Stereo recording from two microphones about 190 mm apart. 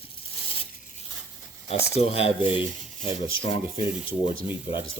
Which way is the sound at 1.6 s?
35° left (ahead or behind).